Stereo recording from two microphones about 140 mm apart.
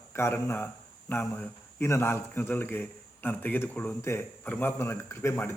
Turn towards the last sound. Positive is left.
turn(degrees=20)  # may be behind; listen again after turning